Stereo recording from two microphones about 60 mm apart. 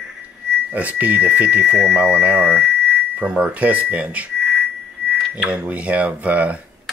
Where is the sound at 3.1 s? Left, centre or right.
Right.